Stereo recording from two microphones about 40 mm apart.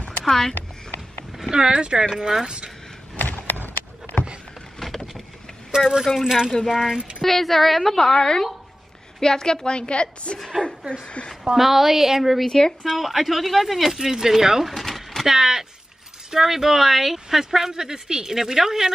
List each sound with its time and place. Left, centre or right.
0.2 s speech: centre
1.5 s speech: right
2.1 s speech: centre
2.4 s speech: right
3.2 s a sound: left
4.7 s vehicle: centre
5.8 s speech: centre
7.2 s speech: centre
8.0 s a woman's voice: centre
11.4 s speech: centre
12.4 s speech: centre
12.8 s speech: centre
14.7 s vehicle: centre
15.2 s speech: centre